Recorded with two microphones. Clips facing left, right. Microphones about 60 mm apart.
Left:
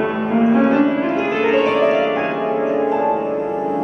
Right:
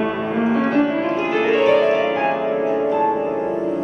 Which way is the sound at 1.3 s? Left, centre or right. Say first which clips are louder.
Right 2 dB; centre.